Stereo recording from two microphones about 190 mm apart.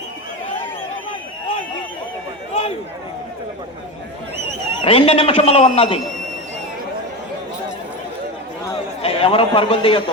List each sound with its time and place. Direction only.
4.8 s a man's voice: 30° left (ahead or behind)
9.0 s a man's voice: 30° left (ahead or behind)